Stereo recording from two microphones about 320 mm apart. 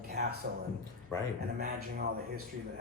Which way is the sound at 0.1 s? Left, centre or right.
Right.